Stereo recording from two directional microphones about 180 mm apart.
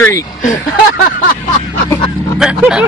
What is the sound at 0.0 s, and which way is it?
Speech, 15° left (ahead or behind).